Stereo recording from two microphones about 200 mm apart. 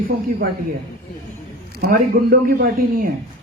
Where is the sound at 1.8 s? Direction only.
45° right (ahead or behind).